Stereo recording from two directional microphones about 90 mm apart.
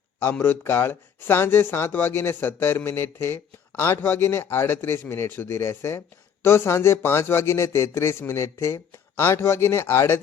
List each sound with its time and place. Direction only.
0.2 s speech: 25° left (ahead or behind)